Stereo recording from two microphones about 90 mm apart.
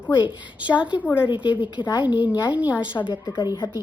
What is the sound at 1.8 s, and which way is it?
Speech, 60° left (ahead or behind).